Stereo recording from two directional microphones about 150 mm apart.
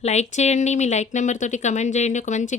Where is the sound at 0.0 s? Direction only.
50° left (ahead or behind).